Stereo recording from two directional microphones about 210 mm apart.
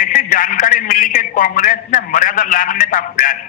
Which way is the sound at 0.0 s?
40° left (ahead or behind).